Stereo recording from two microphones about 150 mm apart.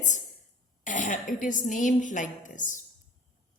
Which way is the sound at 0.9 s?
55° left (ahead or behind).